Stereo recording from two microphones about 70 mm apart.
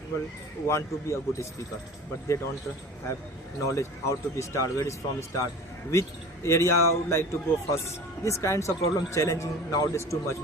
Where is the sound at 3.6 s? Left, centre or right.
Left.